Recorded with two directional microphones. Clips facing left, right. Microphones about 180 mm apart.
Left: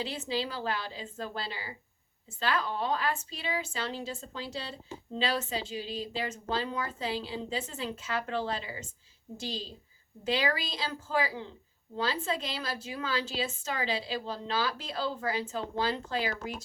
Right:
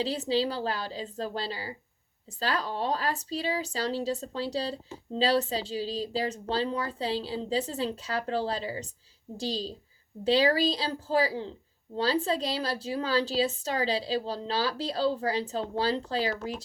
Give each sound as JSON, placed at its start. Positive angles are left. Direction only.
{"t": 0.0, "sound": "a woman's voice", "side_deg": -35}